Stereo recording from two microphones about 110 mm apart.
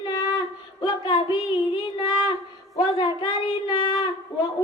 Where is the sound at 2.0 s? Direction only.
45° left (ahead or behind).